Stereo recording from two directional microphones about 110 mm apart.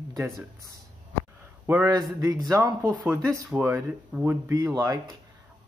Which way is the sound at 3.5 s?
5° right (ahead or behind).